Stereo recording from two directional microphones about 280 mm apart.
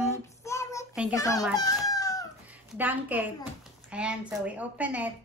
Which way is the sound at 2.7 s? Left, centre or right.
Centre.